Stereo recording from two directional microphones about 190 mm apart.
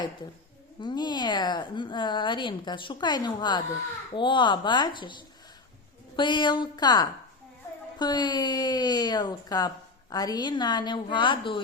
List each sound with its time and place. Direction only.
0.8 s speech: 25° left (ahead or behind)
6.1 s speech: 25° left (ahead or behind)